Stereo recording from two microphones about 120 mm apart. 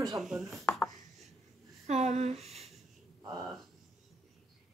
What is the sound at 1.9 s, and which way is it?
Speech, 65° right (ahead or behind).